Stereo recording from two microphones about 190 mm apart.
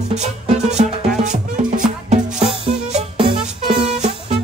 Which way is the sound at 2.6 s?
30° right (ahead or behind).